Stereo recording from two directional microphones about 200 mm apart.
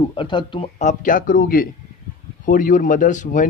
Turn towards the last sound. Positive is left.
turn(degrees=40)  # may be behind; listen again after turning